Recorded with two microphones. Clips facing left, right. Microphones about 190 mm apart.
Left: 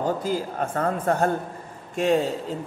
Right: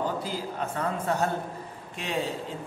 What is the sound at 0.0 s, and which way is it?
A man's voice, 45° left (ahead or behind).